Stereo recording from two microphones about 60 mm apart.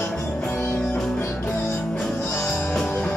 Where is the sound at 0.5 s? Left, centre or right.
Left.